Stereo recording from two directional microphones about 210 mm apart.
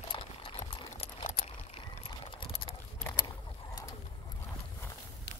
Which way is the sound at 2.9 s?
10° left (ahead or behind).